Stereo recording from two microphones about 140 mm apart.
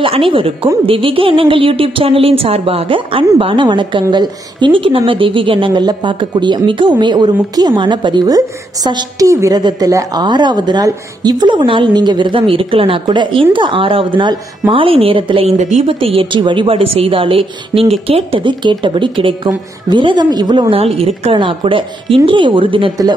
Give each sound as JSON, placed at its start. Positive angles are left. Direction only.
{"t": 0.0, "sound": "a woman's voice", "side_deg": -40}
{"t": 15.5, "sound": "a woman's voice", "side_deg": -55}
{"t": 15.9, "sound": "a woman's voice", "side_deg": -40}